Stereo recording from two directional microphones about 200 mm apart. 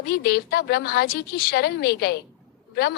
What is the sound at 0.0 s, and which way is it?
A woman's voice, 55° left (ahead or behind).